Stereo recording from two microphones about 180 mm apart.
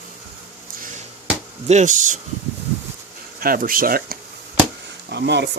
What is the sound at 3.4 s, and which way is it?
Speech, 50° right (ahead or behind).